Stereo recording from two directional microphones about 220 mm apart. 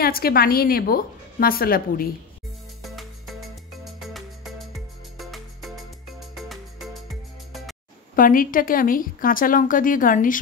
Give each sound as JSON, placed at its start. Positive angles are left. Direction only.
{"t": 0.0, "sound": "a woman's voice", "side_deg": 45}
{"t": 2.8, "sound": "music", "side_deg": 0}
{"t": 8.2, "sound": "a woman's voice", "side_deg": 40}